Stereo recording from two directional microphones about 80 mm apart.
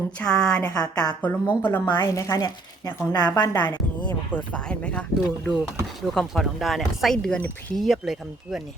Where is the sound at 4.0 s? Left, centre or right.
Centre.